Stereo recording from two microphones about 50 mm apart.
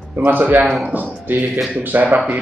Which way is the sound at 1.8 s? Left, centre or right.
Right.